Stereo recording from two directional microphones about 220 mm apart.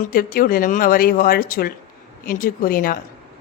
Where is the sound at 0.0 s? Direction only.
40° left (ahead or behind).